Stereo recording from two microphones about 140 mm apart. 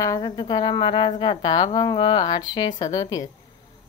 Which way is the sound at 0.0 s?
25° left (ahead or behind).